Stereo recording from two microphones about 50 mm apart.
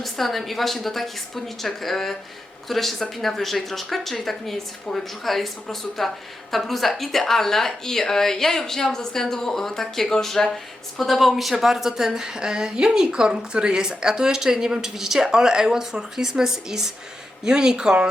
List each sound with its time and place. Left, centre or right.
0.0 s a woman's voice: centre